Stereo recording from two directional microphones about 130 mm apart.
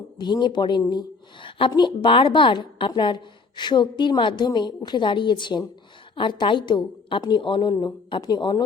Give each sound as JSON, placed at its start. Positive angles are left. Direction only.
{"t": 0.2, "sound": "a woman's voice", "side_deg": 35}